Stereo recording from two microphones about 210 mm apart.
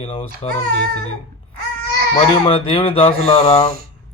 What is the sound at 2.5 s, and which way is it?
Speech, 25° left (ahead or behind).